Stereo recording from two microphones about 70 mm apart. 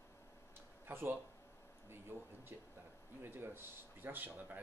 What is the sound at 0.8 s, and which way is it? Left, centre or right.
Speech, right.